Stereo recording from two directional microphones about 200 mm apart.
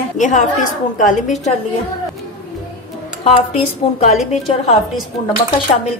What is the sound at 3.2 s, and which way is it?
Speech, 30° left (ahead or behind).